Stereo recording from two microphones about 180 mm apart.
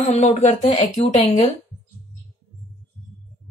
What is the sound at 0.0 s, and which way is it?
Speech, 40° left (ahead or behind).